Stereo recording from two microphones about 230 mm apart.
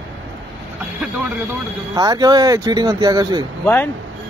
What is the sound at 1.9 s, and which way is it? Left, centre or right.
Speech, centre.